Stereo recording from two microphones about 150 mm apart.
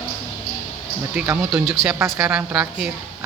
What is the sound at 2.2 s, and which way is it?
Speech, 5° right (ahead or behind).